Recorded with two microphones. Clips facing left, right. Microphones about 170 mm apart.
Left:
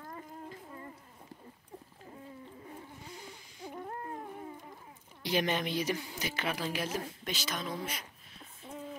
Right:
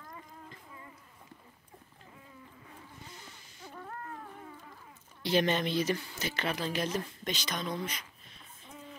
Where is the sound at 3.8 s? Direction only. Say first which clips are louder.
Left 1 dB; 25° left (ahead or behind).